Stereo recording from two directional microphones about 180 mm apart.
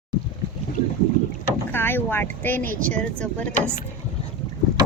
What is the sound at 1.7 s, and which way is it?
A woman's voice, 10° left (ahead or behind).